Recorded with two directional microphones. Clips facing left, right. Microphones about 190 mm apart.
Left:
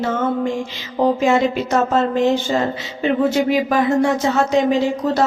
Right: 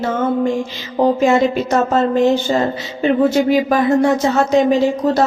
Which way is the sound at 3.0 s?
40° right (ahead or behind).